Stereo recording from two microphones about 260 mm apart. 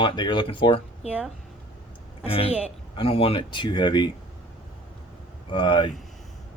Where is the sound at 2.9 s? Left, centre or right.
Left.